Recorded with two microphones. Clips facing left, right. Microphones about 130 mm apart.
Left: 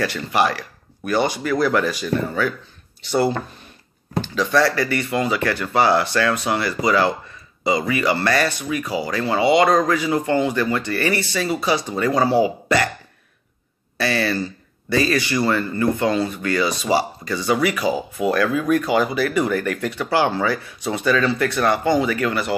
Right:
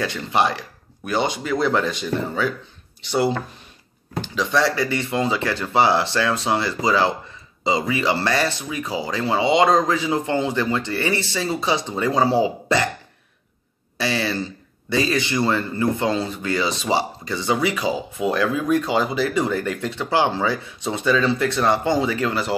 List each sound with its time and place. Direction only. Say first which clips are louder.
0.0 s a man's voice: left 1 dB; 20° right (ahead or behind)
14.2 s a man's voice: left 2 dB; 20° right (ahead or behind)